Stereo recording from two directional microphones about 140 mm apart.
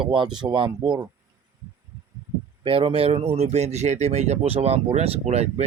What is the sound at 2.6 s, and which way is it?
Speech, 40° right (ahead or behind).